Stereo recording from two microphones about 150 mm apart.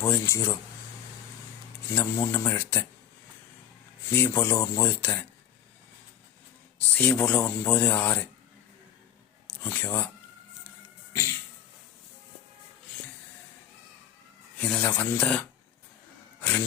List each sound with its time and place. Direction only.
0.0 s speech: 15° left (ahead or behind)
1.9 s speech: 15° left (ahead or behind)
4.1 s speech: 15° left (ahead or behind)
6.9 s speech: 10° left (ahead or behind)
9.5 s speech: 15° left (ahead or behind)
14.6 s speech: 10° left (ahead or behind)
16.4 s a sound: 10° left (ahead or behind)